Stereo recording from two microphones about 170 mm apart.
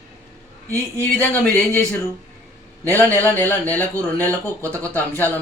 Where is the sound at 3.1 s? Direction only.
10° left (ahead or behind).